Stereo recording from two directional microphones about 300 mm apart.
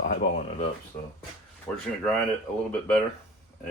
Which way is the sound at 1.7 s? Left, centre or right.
Centre.